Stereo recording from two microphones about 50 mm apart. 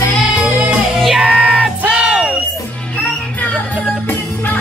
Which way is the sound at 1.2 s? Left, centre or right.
Centre.